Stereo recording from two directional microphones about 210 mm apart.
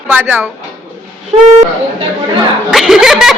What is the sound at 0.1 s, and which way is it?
Speech, 10° right (ahead or behind).